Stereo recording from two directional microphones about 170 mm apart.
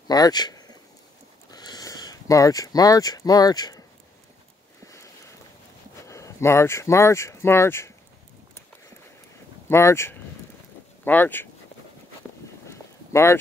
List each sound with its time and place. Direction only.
0.1 s speech: 25° left (ahead or behind)
4.8 s boat: 20° left (ahead or behind)
6.0 s speech: 15° left (ahead or behind)
9.7 s speech: 15° left (ahead or behind)
12.6 s a sound: 15° left (ahead or behind)